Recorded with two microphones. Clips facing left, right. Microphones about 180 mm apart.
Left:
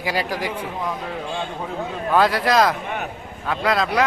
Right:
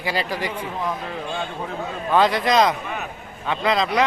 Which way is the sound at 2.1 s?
5° left (ahead or behind).